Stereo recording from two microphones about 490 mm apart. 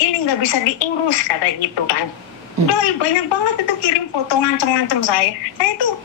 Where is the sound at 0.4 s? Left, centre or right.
Left.